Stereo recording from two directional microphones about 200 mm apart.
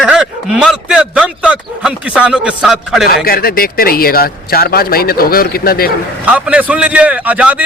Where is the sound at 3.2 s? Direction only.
50° left (ahead or behind).